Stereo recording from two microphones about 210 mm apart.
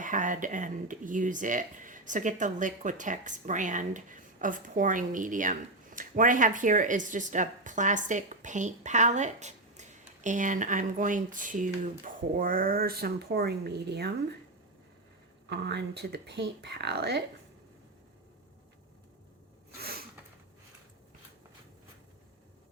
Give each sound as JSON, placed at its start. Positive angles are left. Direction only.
{"t": 0.0, "sound": "speech", "side_deg": -40}
{"t": 15.4, "sound": "speech", "side_deg": -55}
{"t": 19.7, "sound": "a sound", "side_deg": -45}